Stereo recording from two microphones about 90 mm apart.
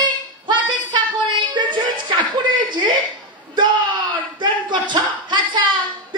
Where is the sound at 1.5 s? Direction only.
60° right (ahead or behind).